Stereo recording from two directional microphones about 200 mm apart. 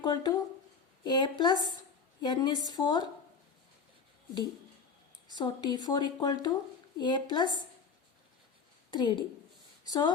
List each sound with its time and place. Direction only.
0.0 s speech: 20° left (ahead or behind)
5.3 s speech: 20° left (ahead or behind)
8.9 s speech: 20° left (ahead or behind)